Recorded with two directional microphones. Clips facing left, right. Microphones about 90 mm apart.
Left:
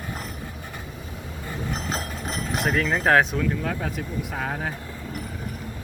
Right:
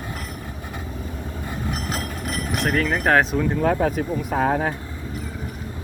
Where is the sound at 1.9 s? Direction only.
30° left (ahead or behind).